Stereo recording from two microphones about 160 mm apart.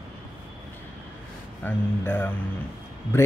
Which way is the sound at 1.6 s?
10° left (ahead or behind).